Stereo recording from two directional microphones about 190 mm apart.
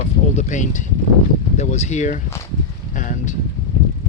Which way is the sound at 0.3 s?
40° left (ahead or behind).